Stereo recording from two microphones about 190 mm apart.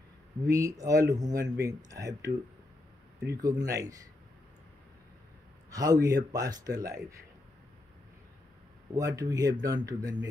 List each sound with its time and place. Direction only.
0.5 s a man's voice: 15° right (ahead or behind)
5.7 s a man's voice: 20° right (ahead or behind)
8.9 s speech: 20° right (ahead or behind)